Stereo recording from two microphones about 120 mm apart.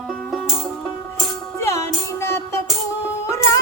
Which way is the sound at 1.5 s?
25° left (ahead or behind).